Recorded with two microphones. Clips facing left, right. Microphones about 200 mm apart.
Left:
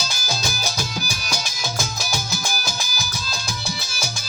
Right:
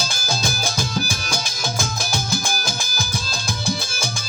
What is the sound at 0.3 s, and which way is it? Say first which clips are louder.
Music: right 3 dB; 50° right (ahead or behind).